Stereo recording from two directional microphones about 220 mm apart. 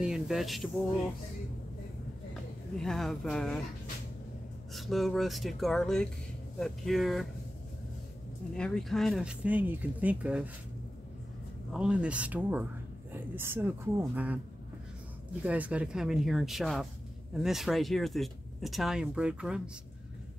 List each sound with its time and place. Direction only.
0.0 s speech: centre (ahead or behind)
2.8 s speech: centre (ahead or behind)
4.7 s speech: centre (ahead or behind)
8.5 s speech: 5° left (ahead or behind)
11.7 s a woman's voice: 5° right (ahead or behind)
15.4 s speech: 5° right (ahead or behind)